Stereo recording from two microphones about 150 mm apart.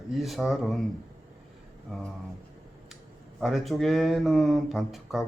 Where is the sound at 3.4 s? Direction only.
Centre (ahead or behind).